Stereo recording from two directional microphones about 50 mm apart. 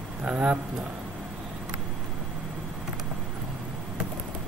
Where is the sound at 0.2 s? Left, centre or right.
Right.